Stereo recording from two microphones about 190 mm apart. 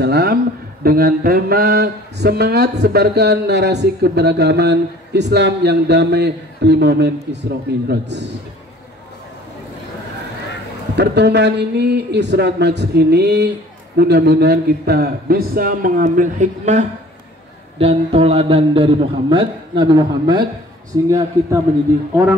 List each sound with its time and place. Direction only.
0.0 s speech: 60° right (ahead or behind)
11.0 s a man's voice: 65° right (ahead or behind); by 21.1 s 20° right (ahead or behind)